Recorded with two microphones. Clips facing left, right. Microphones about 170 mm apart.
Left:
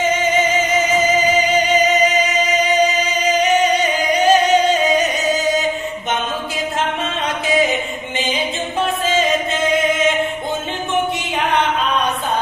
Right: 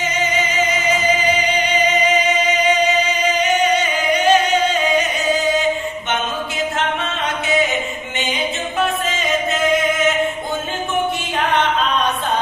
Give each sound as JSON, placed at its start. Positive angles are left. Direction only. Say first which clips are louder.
{"t": 0.0, "sound": "music", "louder": "left 4 dB", "side_deg": 50}
{"t": 3.7, "sound": "singing", "louder": "left 1 dB", "side_deg": 40}
{"t": 9.2, "sound": "music", "louder": "left 1 dB", "side_deg": 25}